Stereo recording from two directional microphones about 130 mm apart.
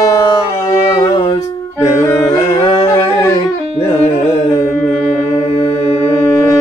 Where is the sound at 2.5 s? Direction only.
40° left (ahead or behind).